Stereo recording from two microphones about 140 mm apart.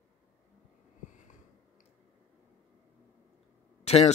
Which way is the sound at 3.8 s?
50° left (ahead or behind).